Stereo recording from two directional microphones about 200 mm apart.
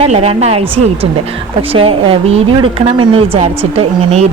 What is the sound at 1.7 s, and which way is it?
A woman's voice, 25° right (ahead or behind).